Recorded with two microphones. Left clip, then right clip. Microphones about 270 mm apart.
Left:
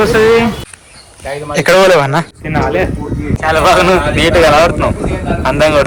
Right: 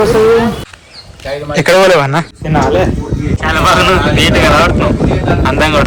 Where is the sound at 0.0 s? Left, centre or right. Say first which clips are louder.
Even; centre.